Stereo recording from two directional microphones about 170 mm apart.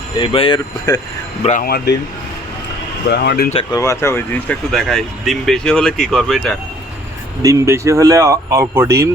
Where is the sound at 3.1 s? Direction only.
75° left (ahead or behind).